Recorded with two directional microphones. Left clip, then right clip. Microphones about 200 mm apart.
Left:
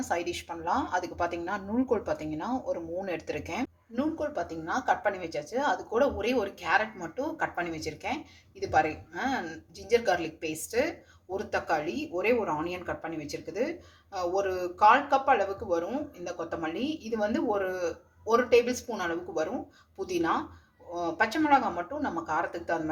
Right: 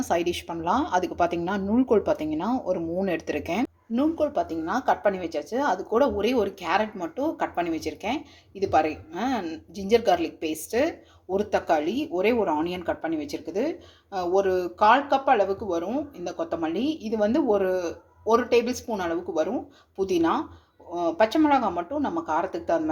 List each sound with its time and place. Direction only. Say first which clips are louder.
0.1 s speech: right 7 dB; 40° right (ahead or behind)